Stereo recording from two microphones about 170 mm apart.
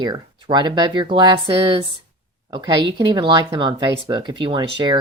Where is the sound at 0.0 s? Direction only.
25° right (ahead or behind).